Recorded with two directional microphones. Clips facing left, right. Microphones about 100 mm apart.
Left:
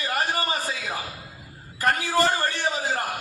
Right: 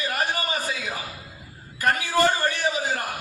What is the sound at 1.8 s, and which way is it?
Speech, 30° left (ahead or behind).